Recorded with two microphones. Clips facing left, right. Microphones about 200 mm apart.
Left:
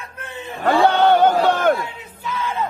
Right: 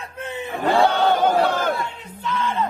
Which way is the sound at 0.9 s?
60° left (ahead or behind).